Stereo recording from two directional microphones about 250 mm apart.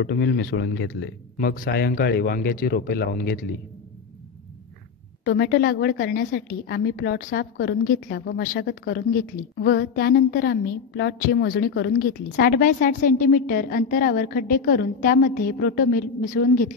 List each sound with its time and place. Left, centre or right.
0.0 s a woman's voice: left
5.2 s a woman's voice: left